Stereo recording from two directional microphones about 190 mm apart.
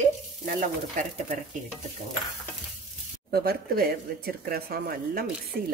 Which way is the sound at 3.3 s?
50° right (ahead or behind).